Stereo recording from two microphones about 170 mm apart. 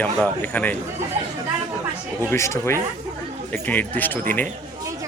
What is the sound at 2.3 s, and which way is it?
Speech, 15° left (ahead or behind).